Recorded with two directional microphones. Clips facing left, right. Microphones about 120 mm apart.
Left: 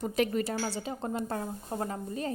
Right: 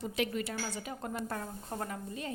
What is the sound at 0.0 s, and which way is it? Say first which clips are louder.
A woman's voice: left 5 dB; 45° left (ahead or behind).